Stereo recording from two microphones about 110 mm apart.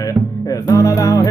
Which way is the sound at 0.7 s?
30° left (ahead or behind).